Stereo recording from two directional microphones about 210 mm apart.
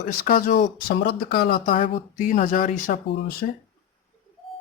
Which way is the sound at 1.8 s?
30° left (ahead or behind).